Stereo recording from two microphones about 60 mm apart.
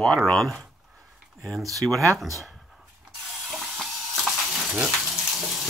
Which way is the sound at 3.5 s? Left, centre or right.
Centre.